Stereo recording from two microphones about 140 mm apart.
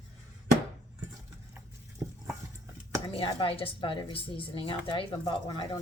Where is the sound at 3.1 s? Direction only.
40° left (ahead or behind).